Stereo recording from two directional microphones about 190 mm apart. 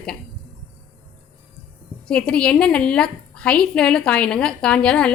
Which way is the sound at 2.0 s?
5° left (ahead or behind).